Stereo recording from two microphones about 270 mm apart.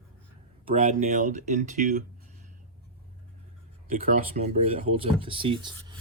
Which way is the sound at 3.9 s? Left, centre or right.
Right.